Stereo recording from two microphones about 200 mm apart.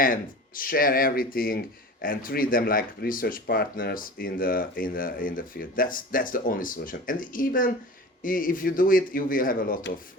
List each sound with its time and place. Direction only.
0.0 s speech: 45° left (ahead or behind)